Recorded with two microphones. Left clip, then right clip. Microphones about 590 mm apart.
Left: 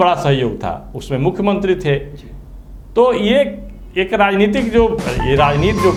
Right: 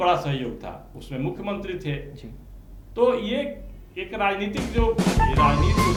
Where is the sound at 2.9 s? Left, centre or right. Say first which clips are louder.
Left 10 dB; left.